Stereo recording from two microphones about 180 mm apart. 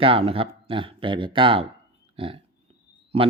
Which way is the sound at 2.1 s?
30° right (ahead or behind).